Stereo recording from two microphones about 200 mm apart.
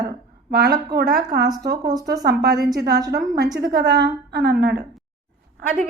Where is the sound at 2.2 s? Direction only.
55° right (ahead or behind).